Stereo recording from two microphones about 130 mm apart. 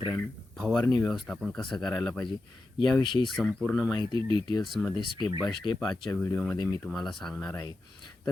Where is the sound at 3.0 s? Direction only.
40° left (ahead or behind).